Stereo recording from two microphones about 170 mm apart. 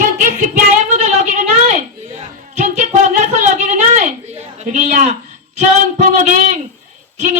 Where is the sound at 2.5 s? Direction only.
45° right (ahead or behind).